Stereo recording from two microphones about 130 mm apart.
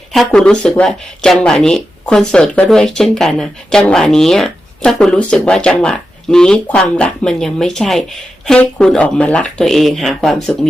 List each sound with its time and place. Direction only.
0.3 s speech: 5° left (ahead or behind)